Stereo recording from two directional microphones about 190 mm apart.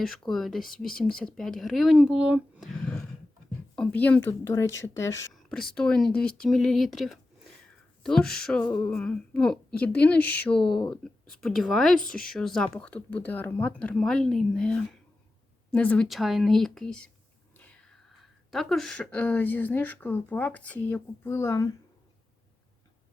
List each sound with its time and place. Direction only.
0.0 s speech: centre (ahead or behind)
5.3 s a sound: 5° left (ahead or behind)
5.7 s speech: 5° left (ahead or behind)
18.2 s speech: centre (ahead or behind)